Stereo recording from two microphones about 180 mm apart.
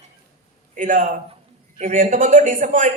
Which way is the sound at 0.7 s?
45° right (ahead or behind).